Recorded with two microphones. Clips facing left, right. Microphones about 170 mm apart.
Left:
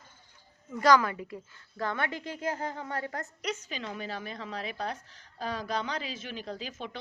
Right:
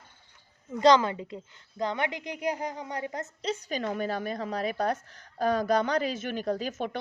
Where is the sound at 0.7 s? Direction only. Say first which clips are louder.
Right 3 dB; 20° right (ahead or behind).